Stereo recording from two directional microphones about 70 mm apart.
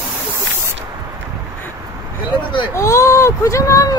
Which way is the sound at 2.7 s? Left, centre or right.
Left.